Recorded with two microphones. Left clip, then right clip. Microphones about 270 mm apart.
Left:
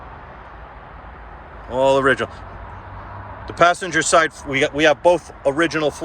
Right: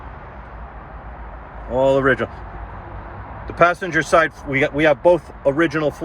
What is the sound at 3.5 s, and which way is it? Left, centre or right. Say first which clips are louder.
Speech: even; centre.